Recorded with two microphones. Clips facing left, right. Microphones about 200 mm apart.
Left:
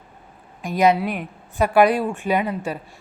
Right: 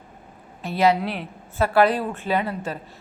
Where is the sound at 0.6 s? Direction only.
15° left (ahead or behind).